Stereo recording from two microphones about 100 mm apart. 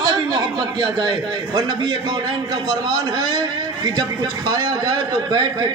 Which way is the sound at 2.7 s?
45° right (ahead or behind).